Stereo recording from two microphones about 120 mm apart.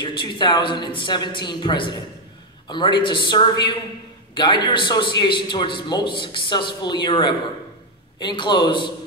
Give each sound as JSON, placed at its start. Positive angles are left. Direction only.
{"t": 0.0, "sound": "a man's voice", "side_deg": 45}